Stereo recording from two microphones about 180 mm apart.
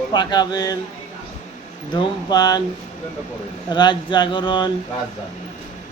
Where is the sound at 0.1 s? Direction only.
25° left (ahead or behind).